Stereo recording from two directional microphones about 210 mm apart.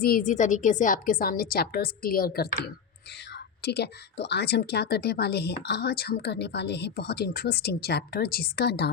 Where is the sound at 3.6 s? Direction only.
50° left (ahead or behind).